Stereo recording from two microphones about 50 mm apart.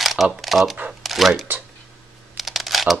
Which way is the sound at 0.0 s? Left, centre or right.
Centre.